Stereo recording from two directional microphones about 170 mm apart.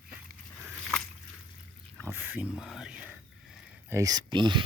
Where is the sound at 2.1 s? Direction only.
10° right (ahead or behind).